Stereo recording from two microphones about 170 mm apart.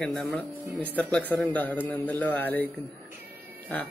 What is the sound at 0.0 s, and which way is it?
A man's voice, 5° left (ahead or behind).